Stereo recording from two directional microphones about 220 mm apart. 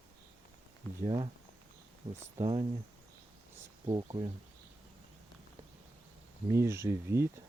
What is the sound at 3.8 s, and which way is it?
Speech, 20° right (ahead or behind).